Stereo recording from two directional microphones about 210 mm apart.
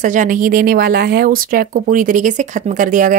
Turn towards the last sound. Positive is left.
turn(degrees=-40)  # may be behind; listen again after turning